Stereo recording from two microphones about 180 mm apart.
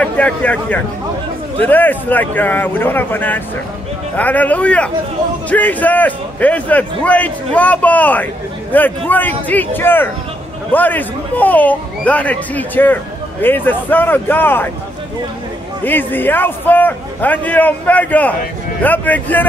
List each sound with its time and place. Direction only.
0.0 s speech: 5° left (ahead or behind)
15.8 s speech: 10° left (ahead or behind)